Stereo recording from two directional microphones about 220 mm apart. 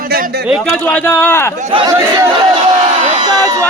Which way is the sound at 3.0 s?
35° right (ahead or behind).